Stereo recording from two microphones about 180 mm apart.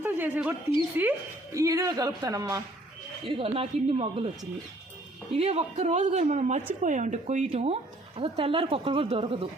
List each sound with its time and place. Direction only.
0.0 s a sound: 10° right (ahead or behind)
0.9 s a woman's voice: 10° right (ahead or behind)
3.2 s speech: 30° right (ahead or behind)
5.4 s speech: 35° right (ahead or behind)